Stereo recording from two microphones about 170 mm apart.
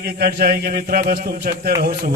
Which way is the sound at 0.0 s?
65° right (ahead or behind).